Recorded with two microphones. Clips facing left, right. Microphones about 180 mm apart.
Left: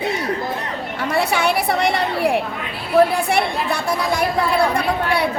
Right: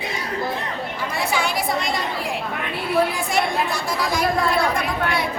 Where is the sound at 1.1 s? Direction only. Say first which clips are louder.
Left 6 dB; 65° left (ahead or behind).